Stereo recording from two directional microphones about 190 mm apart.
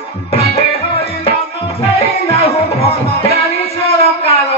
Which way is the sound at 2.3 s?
30° left (ahead or behind).